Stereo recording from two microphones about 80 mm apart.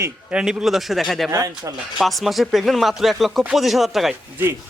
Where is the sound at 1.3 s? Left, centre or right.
Right.